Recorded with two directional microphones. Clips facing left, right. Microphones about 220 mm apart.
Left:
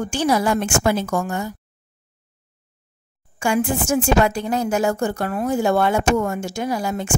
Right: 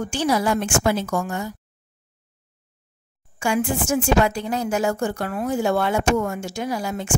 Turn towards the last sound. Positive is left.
turn(degrees=50)  # may be behind; listen again after turning